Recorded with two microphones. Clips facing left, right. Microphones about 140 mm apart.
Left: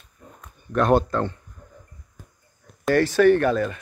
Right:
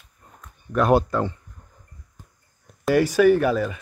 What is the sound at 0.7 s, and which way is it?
Speech, 5° right (ahead or behind).